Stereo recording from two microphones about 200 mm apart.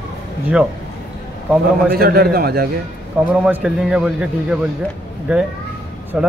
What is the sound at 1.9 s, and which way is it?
Speech, 50° right (ahead or behind).